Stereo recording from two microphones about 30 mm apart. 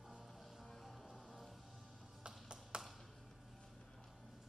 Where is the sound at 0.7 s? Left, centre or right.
Centre.